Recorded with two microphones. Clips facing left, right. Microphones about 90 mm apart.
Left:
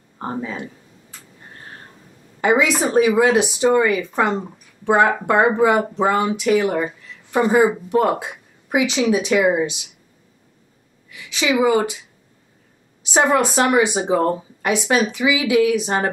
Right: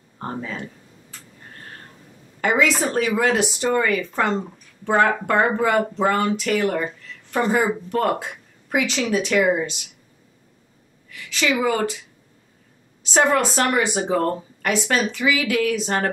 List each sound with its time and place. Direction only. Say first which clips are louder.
0.2 s speech: left 3 dB; 15° left (ahead or behind)
2.4 s speech: left 3 dB; 15° left (ahead or behind)
11.1 s speech: left 2 dB; 15° left (ahead or behind)
13.0 s speech: left 2 dB; 15° left (ahead or behind)